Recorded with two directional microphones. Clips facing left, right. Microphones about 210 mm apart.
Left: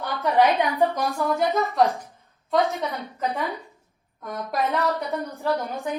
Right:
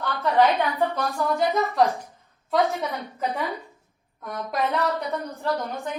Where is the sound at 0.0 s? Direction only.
15° left (ahead or behind).